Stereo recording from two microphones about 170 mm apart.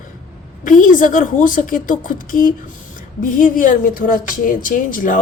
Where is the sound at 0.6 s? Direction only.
50° left (ahead or behind).